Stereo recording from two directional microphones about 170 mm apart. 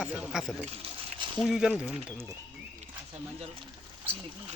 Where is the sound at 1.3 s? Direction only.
Centre (ahead or behind).